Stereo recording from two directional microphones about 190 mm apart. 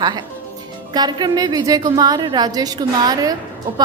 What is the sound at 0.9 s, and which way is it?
A woman's voice, 20° right (ahead or behind).